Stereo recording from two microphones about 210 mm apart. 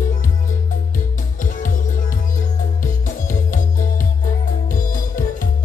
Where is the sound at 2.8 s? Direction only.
40° left (ahead or behind).